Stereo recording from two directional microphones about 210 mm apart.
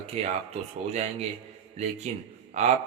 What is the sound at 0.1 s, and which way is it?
Speech, 30° right (ahead or behind).